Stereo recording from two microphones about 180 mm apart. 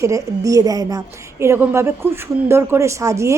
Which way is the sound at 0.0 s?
15° right (ahead or behind).